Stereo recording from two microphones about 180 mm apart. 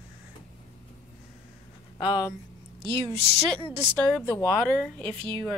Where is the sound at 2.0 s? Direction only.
25° left (ahead or behind).